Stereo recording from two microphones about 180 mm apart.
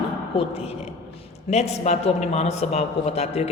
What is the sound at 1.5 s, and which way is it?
Speech, 40° left (ahead or behind).